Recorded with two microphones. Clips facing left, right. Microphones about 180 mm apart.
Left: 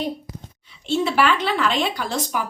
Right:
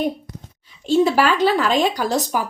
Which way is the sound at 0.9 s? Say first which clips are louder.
Right 4 dB; 40° right (ahead or behind).